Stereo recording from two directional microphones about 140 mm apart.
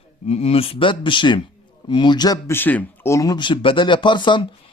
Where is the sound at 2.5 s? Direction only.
15° left (ahead or behind).